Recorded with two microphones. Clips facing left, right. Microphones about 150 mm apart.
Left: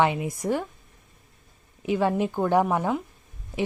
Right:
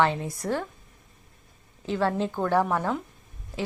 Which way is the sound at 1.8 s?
15° left (ahead or behind).